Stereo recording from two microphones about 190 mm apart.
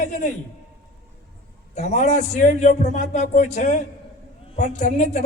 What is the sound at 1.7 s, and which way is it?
A man's voice, 40° left (ahead or behind).